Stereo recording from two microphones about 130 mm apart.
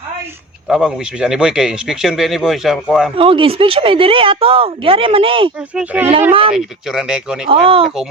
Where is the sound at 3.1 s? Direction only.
45° right (ahead or behind).